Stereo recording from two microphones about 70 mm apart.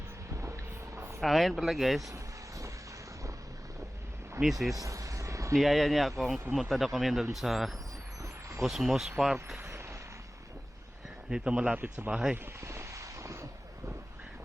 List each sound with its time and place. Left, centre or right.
0.3 s vehicle: right
1.2 s speech: centre
2.0 s vehicle: right
4.4 s speech: right
4.7 s vehicle: right
5.5 s speech: centre
8.2 s a sound: right
8.6 s speech: centre
9.6 s vehicle: right
11.3 s speech: centre
12.5 s vehicle: right